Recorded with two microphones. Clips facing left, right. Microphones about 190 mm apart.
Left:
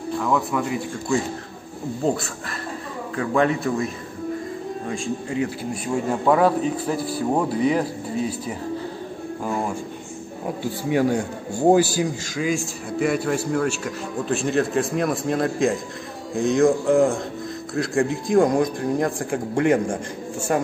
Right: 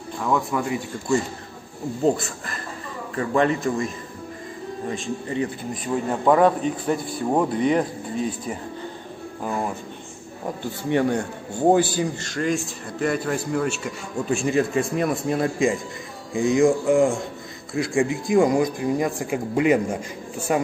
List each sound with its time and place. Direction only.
0.2 s a man's voice: centre (ahead or behind)
5.3 s a man's voice: 5° left (ahead or behind)
10.4 s a man's voice: 5° left (ahead or behind)